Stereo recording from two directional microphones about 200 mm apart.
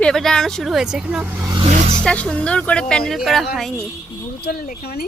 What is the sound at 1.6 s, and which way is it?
Vehicle, 35° right (ahead or behind).